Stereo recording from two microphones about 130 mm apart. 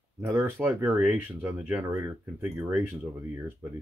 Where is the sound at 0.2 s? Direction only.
20° right (ahead or behind).